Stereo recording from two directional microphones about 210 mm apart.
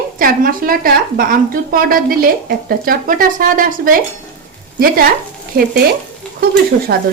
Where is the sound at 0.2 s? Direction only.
45° right (ahead or behind).